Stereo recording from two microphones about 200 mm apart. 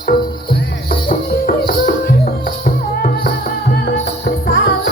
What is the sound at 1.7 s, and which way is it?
Music, 45° left (ahead or behind).